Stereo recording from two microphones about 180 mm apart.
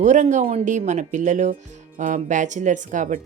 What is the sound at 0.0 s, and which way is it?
A woman's voice, 40° right (ahead or behind).